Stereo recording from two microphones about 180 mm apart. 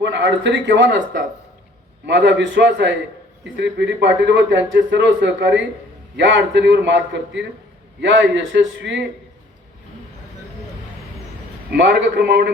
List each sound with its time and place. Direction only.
0.0 s a man's voice: 80° right
2.0 s a man's voice: 75° right (ahead or behind)
11.7 s a man's voice: 75° right (ahead or behind)